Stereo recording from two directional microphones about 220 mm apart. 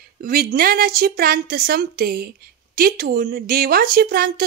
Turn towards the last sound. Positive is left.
turn(degrees=-45)  # may be behind; listen again after turning